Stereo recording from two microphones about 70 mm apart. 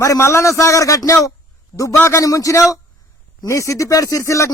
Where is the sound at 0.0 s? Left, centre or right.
Left.